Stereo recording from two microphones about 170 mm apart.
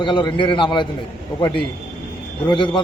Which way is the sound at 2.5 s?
25° left (ahead or behind).